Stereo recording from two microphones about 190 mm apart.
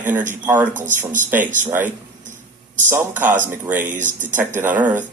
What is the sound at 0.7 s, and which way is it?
Speech, 40° right (ahead or behind).